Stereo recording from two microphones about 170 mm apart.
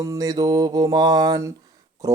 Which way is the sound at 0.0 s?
20° right (ahead or behind).